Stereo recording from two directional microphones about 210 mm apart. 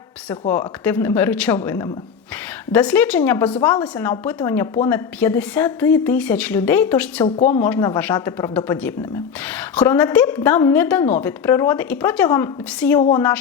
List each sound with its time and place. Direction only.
0.3 s a woman's voice: 10° left (ahead or behind)
7.3 s a woman's voice: 30° left (ahead or behind)
7.6 s a woman's voice: 15° left (ahead or behind)
13.0 s a woman's voice: 25° left (ahead or behind)